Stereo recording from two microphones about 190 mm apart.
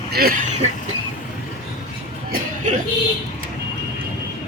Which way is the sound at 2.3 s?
40° right (ahead or behind).